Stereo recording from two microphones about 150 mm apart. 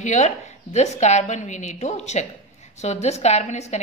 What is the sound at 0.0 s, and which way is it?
A woman's voice, 50° left (ahead or behind).